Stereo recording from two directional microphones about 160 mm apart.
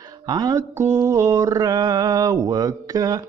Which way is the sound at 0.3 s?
25° right (ahead or behind).